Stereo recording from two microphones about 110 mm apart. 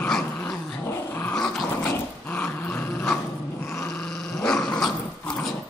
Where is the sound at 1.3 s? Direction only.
5° left (ahead or behind).